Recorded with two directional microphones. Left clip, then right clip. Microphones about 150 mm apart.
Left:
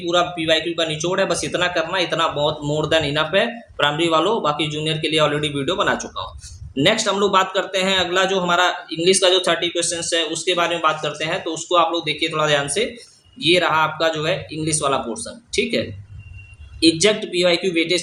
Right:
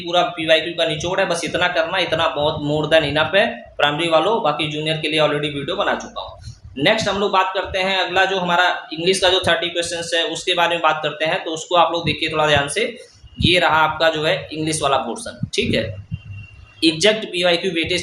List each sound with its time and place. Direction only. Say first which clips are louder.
0.0 s a man's voice: right 1 dB; 30° left (ahead or behind)
16.8 s speech: even; 20° left (ahead or behind)